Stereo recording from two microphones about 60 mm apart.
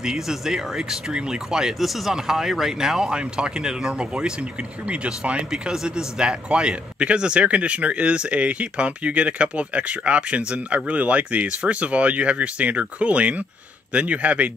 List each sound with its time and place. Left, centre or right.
0.0 s speech: centre